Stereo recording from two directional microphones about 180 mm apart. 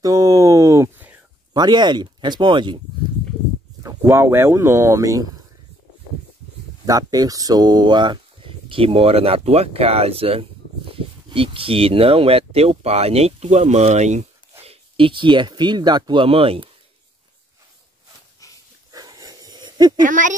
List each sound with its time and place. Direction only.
0.0 s a sound: 20° right (ahead or behind)
1.5 s speech: 25° right (ahead or behind)
4.1 s speech: 15° right (ahead or behind)
6.9 s speech: 20° right (ahead or behind)
18.9 s wheeze: 20° right (ahead or behind)
20.0 s speech: 45° right (ahead or behind)